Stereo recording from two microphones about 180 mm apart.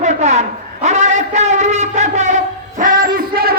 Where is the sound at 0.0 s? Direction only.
40° right (ahead or behind).